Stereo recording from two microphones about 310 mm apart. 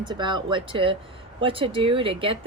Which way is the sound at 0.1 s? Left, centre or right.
Centre.